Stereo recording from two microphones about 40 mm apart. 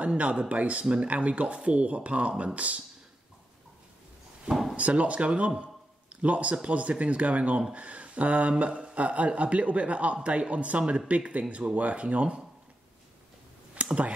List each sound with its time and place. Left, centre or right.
0.2 s speech: right
4.7 s speech: right
5.6 s a sound: right
6.7 s speech: right
8.6 s speech: right
13.8 s a sound: right